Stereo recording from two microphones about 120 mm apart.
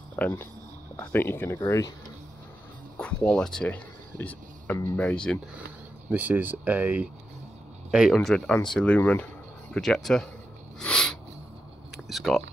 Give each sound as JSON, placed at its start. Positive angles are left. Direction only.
{"t": 0.1, "sound": "speech", "side_deg": 15}
{"t": 3.3, "sound": "speech", "side_deg": 5}
{"t": 3.7, "sound": "a sound", "side_deg": 15}
{"t": 4.9, "sound": "speech", "side_deg": 10}
{"t": 6.0, "sound": "speech", "side_deg": -15}
{"t": 7.9, "sound": "speech", "side_deg": 0}
{"t": 10.8, "sound": "a sound", "side_deg": 5}